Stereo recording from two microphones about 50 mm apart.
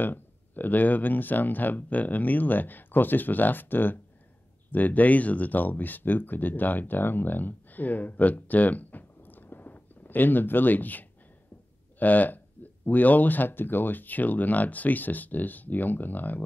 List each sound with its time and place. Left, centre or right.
0.0 s speech: left